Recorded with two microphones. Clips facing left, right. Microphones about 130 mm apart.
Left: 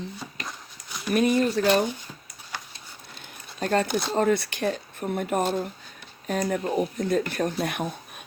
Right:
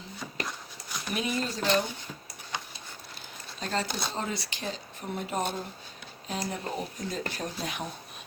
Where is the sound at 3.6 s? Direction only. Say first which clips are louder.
Left 8 dB; 55° left (ahead or behind).